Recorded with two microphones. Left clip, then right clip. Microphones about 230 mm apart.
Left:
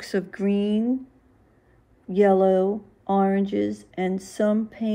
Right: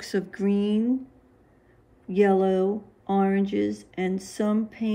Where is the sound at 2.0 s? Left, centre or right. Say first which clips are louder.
Left 3 dB; centre.